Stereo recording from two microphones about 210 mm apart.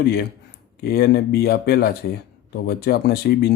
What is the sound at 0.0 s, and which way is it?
Speech, 50° left (ahead or behind).